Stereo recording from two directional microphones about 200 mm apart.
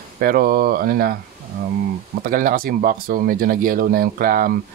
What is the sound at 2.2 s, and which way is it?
Speech, 45° right (ahead or behind).